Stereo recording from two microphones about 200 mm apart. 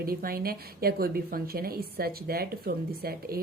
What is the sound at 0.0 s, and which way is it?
A woman's voice, 50° right (ahead or behind).